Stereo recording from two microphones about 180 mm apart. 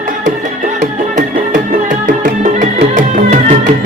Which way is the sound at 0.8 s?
45° right (ahead or behind).